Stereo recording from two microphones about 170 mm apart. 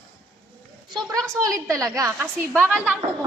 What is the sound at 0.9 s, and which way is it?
A woman's voice, 25° right (ahead or behind).